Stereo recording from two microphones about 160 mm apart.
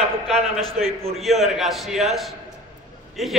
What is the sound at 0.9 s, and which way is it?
Speech, 40° right (ahead or behind).